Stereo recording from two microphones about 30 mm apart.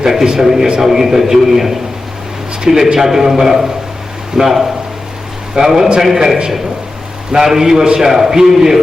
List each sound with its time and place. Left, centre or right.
0.0 s a man's voice: centre